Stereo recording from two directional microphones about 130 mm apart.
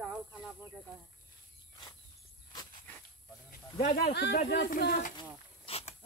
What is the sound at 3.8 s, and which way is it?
Speech, 90° left.